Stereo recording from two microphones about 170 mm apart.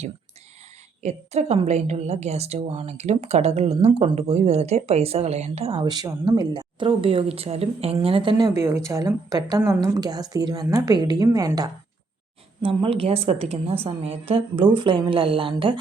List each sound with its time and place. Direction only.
1.0 s a woman's voice: 40° right (ahead or behind); by 11.7 s 20° right (ahead or behind)
12.6 s a woman's voice: 35° right (ahead or behind)